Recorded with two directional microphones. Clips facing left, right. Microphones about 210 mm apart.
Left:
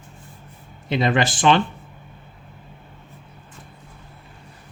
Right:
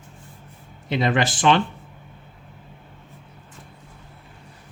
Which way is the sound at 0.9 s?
25° left (ahead or behind).